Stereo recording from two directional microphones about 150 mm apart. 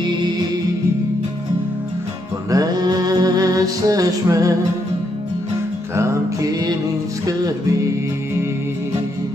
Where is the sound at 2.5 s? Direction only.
25° right (ahead or behind).